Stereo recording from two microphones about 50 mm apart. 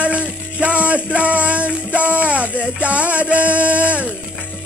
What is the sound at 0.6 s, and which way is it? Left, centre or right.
Music, right.